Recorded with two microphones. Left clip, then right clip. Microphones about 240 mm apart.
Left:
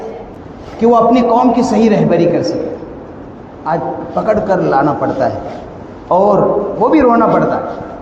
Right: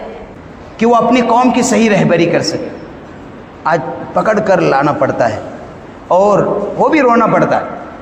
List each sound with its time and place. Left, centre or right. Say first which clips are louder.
0.8 s a man's voice: left 1 dB; right
3.6 s a man's voice: right 2 dB; right